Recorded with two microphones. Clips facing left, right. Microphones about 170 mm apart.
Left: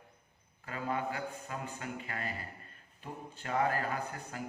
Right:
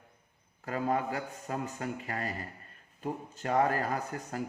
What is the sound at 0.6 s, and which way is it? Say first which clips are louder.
Speech: right 5 dB; 40° right (ahead or behind).